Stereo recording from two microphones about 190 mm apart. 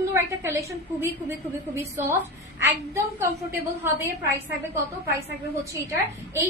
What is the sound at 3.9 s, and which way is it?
Speech, 15° right (ahead or behind).